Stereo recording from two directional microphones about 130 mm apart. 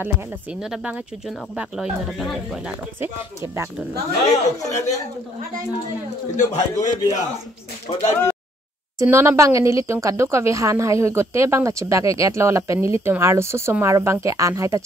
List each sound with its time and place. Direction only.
1.6 s speech: 5° right (ahead or behind)
4.6 s speech: 60° left (ahead or behind)
6.3 s a man's voice: 70° left (ahead or behind)
8.1 s speech: 20° left (ahead or behind)
9.0 s speech: 20° right (ahead or behind)